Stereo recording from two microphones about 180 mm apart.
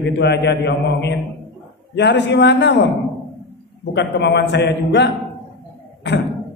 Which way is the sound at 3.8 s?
75° left (ahead or behind).